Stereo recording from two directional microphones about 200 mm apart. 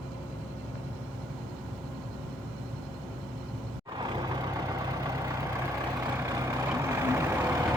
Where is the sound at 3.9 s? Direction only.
20° right (ahead or behind).